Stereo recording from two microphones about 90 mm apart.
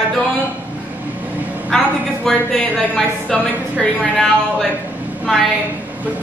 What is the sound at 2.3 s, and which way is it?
Speech, centre (ahead or behind).